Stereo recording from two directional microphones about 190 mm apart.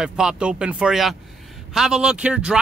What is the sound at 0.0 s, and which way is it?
Speech, 5° right (ahead or behind).